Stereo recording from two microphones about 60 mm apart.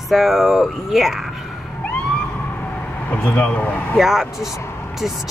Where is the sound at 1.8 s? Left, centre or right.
Centre.